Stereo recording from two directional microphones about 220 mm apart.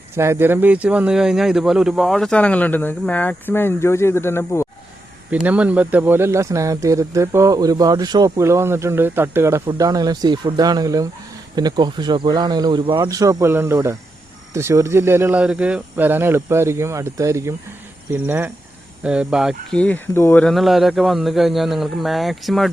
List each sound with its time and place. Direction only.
0.2 s speech: 10° right (ahead or behind); by 4.7 s 10° left (ahead or behind)
5.3 s speech: 5° right (ahead or behind)